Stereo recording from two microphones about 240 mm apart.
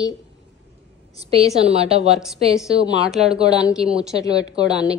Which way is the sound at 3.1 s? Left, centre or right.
Centre.